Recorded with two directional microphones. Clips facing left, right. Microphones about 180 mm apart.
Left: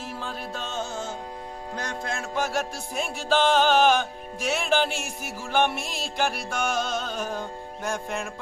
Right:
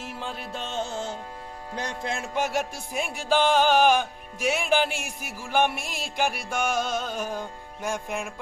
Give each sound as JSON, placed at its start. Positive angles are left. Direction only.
{"t": 0.1, "sound": "music", "side_deg": -20}